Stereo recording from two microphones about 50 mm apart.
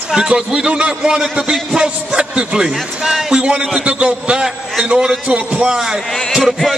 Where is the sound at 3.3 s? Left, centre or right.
Centre.